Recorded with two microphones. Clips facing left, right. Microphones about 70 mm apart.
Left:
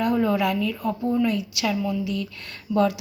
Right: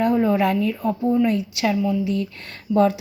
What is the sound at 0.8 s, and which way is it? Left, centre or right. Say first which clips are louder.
Speech: right 3 dB; right.